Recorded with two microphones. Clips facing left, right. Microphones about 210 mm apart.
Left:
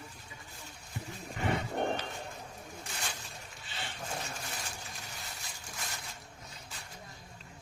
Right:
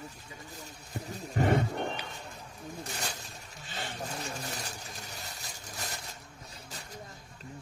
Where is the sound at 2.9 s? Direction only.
40° right (ahead or behind).